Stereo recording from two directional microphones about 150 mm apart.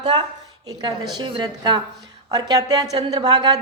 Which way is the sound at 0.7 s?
30° right (ahead or behind).